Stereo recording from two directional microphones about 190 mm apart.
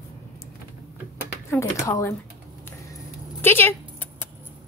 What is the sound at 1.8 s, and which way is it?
Speech, 15° left (ahead or behind).